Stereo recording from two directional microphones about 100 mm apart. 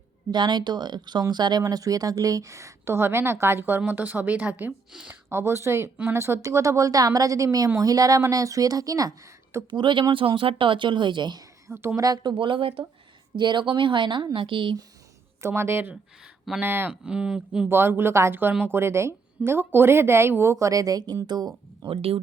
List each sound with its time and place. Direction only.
0.3 s a woman's voice: 45° right (ahead or behind); by 4.7 s 15° right (ahead or behind)
4.9 s speech: 5° right (ahead or behind)
5.3 s a woman's voice: 25° right (ahead or behind)
9.7 s speech: 50° right (ahead or behind)
11.7 s a woman's voice: 25° right (ahead or behind)
11.9 s speech: 40° right (ahead or behind); by 12.8 s 65° right (ahead or behind)
13.3 s speech: 50° right (ahead or behind)
15.4 s a woman's voice: 25° right (ahead or behind)
16.9 s speech: 10° right (ahead or behind)
17.7 s a woman's voice: 20° right (ahead or behind); by 21.8 s 45° right (ahead or behind)
21.8 s speech: 75° right (ahead or behind)